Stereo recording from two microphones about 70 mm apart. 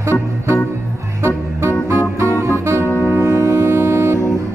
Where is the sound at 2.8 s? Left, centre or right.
Left.